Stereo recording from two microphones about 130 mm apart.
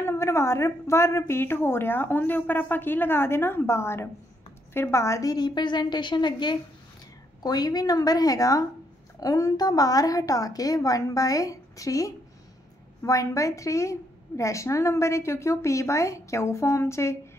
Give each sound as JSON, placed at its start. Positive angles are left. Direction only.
{"t": 0.0, "sound": "a woman's voice", "side_deg": 20}